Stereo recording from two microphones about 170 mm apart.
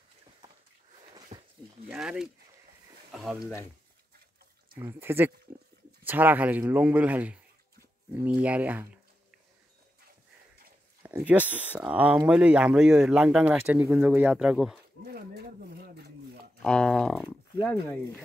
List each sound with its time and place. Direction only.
1.3 s a sound: 25° right (ahead or behind)
1.9 s speech: 5° right (ahead or behind)
4.7 s speech: 15° right (ahead or behind)
11.0 s speech: 15° right (ahead or behind)
15.0 s a sound: 65° right (ahead or behind)
16.6 s speech: 5° left (ahead or behind)